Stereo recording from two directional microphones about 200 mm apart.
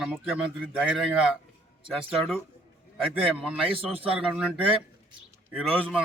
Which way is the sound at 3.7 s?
25° right (ahead or behind).